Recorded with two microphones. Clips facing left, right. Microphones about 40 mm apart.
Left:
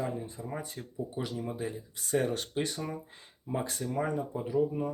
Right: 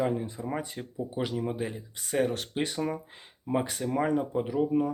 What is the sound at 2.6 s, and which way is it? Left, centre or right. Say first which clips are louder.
Speech: right 2 dB; right.